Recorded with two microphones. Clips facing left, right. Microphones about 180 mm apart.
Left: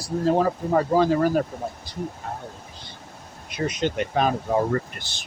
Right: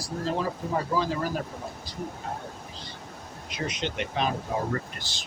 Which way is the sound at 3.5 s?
50° left (ahead or behind).